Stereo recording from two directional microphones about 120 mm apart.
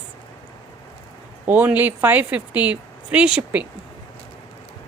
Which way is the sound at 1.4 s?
15° right (ahead or behind).